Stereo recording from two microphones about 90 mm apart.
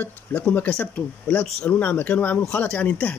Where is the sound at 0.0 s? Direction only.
20° left (ahead or behind).